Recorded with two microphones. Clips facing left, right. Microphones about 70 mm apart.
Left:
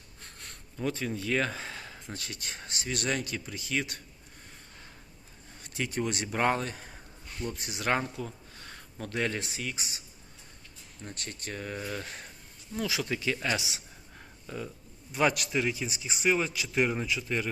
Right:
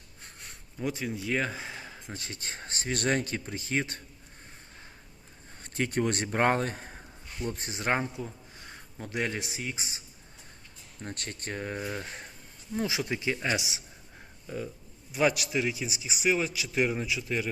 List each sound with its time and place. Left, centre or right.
0.3 s speech: centre; by 4.0 s right
5.6 s speech: right
11.0 s speech: right
11.8 s speech: right
14.4 s a man's voice: centre